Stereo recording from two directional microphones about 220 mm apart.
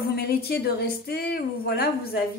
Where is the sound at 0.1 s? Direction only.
45° left (ahead or behind).